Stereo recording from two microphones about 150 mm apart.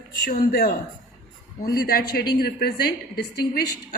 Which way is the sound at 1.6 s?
90° left.